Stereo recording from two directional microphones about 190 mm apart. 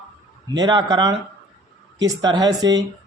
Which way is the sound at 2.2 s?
20° right (ahead or behind).